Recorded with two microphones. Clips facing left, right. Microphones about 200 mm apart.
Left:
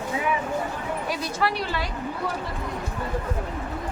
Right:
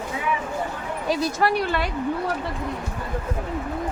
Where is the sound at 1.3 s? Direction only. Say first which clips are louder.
Right 4 dB; 50° right (ahead or behind).